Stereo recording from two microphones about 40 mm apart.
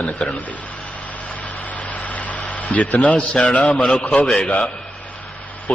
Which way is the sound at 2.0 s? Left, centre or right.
Left.